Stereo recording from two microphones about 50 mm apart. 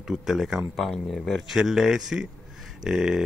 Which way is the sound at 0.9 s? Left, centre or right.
Centre.